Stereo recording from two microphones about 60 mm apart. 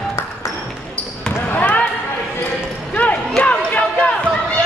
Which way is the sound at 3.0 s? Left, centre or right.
Left.